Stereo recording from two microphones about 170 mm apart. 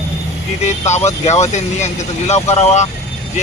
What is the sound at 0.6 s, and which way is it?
Speech, 40° left (ahead or behind).